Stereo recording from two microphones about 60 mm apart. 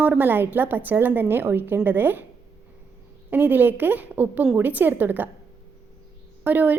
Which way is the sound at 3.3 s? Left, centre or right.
Right.